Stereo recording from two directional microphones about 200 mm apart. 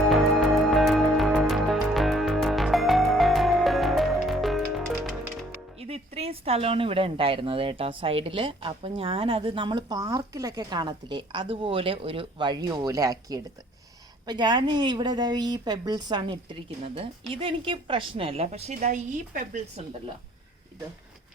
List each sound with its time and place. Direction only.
0.0 s music: centre (ahead or behind)
5.8 s speech: 30° right (ahead or behind)